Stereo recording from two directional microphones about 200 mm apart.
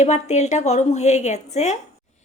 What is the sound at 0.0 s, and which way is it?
A woman's voice, 35° left (ahead or behind).